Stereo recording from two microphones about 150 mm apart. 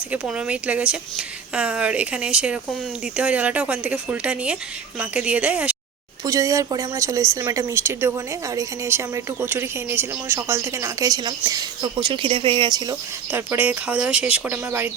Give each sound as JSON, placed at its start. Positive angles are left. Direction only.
{"t": 0.1, "sound": "speech", "side_deg": -5}
{"t": 6.2, "sound": "speech", "side_deg": -20}